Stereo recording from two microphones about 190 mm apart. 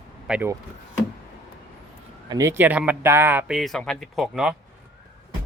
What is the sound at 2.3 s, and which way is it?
Speech, 15° right (ahead or behind).